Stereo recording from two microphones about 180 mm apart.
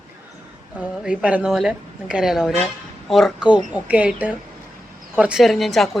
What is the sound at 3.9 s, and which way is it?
A woman's voice, 10° right (ahead or behind).